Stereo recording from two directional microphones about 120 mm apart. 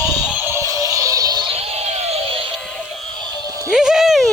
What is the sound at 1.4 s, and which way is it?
Music, 60° right (ahead or behind).